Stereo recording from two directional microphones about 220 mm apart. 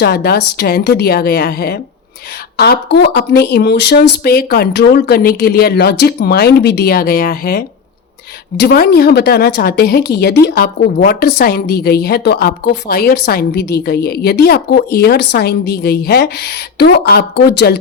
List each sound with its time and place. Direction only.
0.0 s a woman's voice: 45° left (ahead or behind)